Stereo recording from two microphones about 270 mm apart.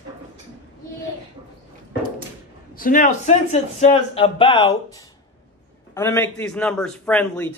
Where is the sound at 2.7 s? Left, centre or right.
Left.